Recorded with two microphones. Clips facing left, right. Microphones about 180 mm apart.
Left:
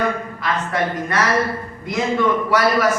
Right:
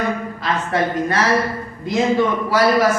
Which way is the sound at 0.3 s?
30° right (ahead or behind).